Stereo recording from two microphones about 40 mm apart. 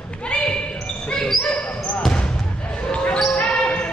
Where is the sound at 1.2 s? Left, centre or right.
Centre.